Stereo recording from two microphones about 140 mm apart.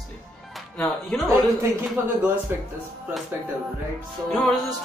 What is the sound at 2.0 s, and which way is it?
Speech, 15° right (ahead or behind).